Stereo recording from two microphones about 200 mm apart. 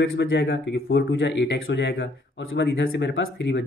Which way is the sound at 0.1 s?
65° left (ahead or behind).